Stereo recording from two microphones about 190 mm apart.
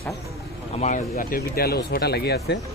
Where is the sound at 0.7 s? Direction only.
40° left (ahead or behind).